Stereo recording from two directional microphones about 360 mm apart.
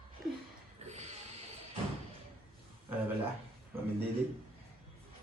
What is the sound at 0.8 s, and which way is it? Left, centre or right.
Snort, centre.